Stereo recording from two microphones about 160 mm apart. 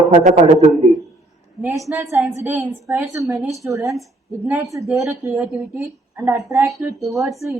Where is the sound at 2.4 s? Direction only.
15° right (ahead or behind).